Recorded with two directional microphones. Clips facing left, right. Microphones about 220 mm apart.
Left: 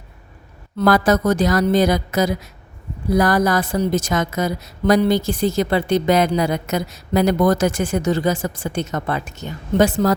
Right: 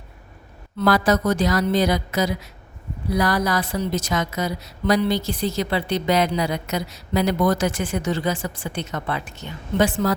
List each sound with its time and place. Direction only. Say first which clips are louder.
0.8 s speech: left 3 dB; 45° left (ahead or behind)